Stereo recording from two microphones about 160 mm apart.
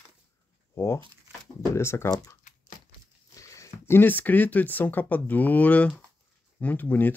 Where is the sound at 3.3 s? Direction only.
20° left (ahead or behind).